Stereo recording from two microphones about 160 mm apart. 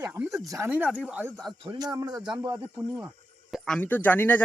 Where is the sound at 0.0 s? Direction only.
15° right (ahead or behind).